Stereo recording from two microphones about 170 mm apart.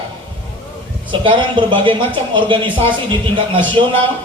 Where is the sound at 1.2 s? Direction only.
30° right (ahead or behind).